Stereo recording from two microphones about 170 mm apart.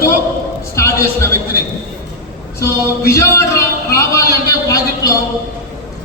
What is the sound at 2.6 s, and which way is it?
Speech, 15° left (ahead or behind).